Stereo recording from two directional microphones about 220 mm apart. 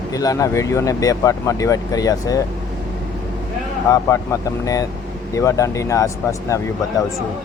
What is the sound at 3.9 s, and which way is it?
Speech, 15° left (ahead or behind).